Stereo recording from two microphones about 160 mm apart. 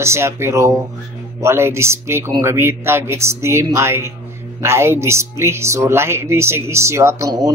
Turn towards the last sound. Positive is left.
turn(degrees=-20)  # may be behind; listen again after turning